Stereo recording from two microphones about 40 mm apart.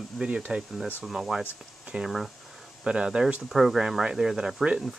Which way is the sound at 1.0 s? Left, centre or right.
Centre.